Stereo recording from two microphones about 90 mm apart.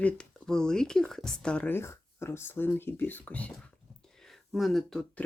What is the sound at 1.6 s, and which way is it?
Speech, 25° left (ahead or behind).